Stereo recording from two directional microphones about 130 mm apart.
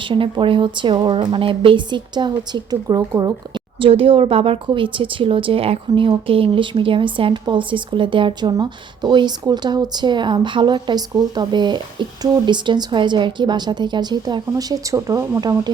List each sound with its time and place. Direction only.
0.1 s speech: 40° right (ahead or behind)
3.8 s speech: 45° right (ahead or behind)